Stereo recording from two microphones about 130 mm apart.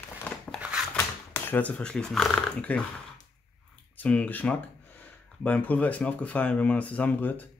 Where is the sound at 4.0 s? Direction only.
10° left (ahead or behind).